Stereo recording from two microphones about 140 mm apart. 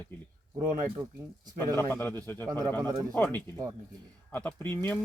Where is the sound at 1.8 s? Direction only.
15° left (ahead or behind).